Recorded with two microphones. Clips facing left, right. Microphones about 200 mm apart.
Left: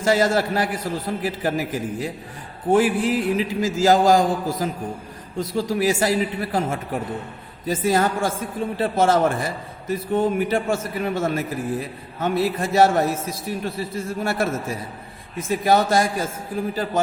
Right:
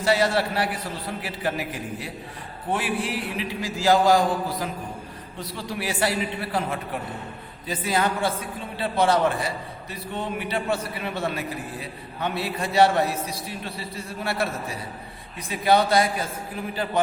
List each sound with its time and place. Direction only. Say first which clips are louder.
0.0 s a man's voice: left 3 dB; 45° left (ahead or behind)